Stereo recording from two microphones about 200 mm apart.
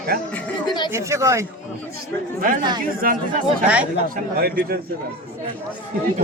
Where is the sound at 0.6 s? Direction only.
20° left (ahead or behind).